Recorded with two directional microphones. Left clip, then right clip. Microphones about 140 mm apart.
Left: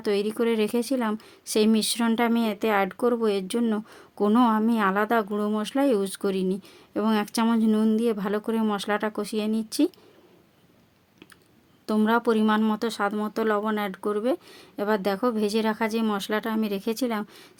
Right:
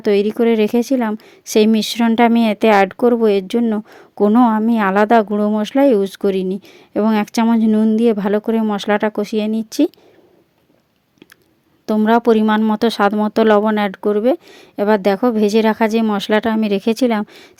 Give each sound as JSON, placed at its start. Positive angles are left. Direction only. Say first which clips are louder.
{"t": 0.0, "sound": "speech", "louder": "right 10 dB", "side_deg": -50}
{"t": 3.9, "sound": "a sound", "louder": "right 10 dB", "side_deg": -50}
{"t": 4.3, "sound": "speech", "louder": "right 7 dB", "side_deg": -40}
{"t": 7.4, "sound": "speech", "louder": "right 8 dB", "side_deg": -45}
{"t": 7.9, "sound": "speech", "louder": "right 10 dB", "side_deg": -55}
{"t": 12.0, "sound": "speech", "louder": "right 10 dB", "side_deg": -55}